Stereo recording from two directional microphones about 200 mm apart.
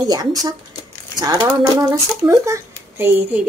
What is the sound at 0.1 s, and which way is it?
Speech, 20° right (ahead or behind).